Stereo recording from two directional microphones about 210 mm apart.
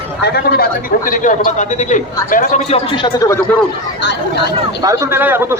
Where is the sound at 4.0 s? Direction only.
55° left (ahead or behind).